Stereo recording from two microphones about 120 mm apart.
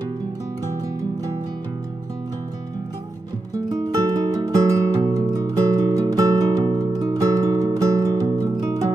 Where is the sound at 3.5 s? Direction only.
30° right (ahead or behind).